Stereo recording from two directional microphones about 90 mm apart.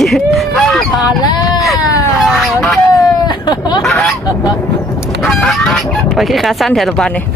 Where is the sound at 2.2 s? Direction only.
Centre (ahead or behind).